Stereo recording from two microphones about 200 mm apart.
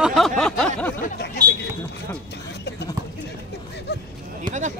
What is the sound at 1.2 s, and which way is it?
Chatter, 60° left (ahead or behind).